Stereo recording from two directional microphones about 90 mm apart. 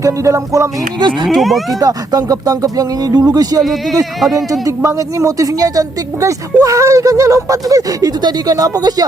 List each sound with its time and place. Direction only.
0.0 s speech: 35° right (ahead or behind)
0.9 s speech: 55° right (ahead or behind)
1.3 s speech: centre (ahead or behind)
1.8 s speech: 45° right (ahead or behind)
4.2 s speech: centre (ahead or behind)
4.6 s speech: 35° right (ahead or behind)